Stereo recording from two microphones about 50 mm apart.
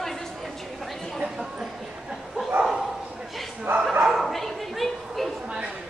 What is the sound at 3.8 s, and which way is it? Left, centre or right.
Bow-wow, centre.